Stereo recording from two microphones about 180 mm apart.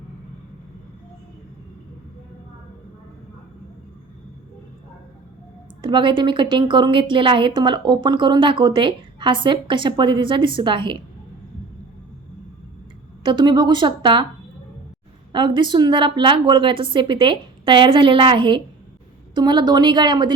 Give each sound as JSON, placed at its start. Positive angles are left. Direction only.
{"t": 5.8, "sound": "a woman's voice", "side_deg": -25}
{"t": 13.2, "sound": "a woman's voice", "side_deg": -25}
{"t": 15.3, "sound": "a woman's voice", "side_deg": -25}